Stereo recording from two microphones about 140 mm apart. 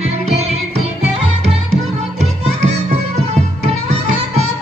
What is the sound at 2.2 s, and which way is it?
Music, 50° right (ahead or behind).